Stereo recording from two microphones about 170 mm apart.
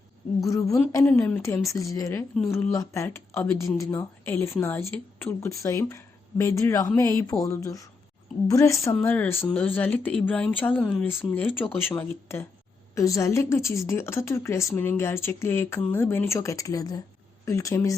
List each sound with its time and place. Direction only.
0.4 s speech: 20° left (ahead or behind)